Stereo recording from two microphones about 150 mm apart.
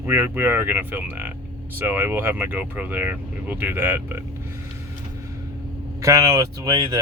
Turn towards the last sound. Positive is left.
turn(degrees=-25)  # may be behind; listen again after turning